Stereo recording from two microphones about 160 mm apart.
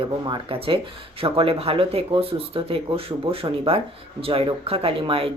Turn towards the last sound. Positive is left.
turn(degrees=-35)  # may be behind; listen again after turning